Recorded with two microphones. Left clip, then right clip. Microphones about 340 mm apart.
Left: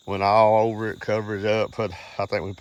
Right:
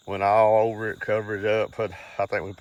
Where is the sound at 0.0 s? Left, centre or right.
Left.